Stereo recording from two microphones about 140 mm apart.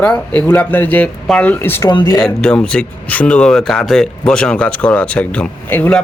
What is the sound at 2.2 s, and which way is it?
Speech, 5° left (ahead or behind).